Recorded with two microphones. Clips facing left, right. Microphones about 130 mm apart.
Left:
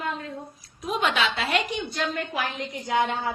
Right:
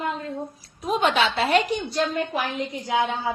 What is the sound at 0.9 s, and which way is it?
Speech, 30° right (ahead or behind).